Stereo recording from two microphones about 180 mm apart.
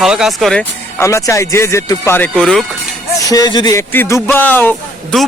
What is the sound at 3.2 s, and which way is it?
Speech, 20° left (ahead or behind).